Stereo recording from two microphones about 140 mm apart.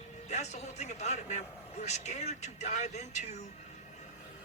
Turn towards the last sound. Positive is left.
turn(degrees=55)  # may be behind; listen again after turning